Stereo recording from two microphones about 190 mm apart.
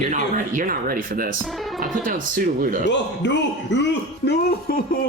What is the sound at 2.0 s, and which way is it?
Speech, 45° right (ahead or behind).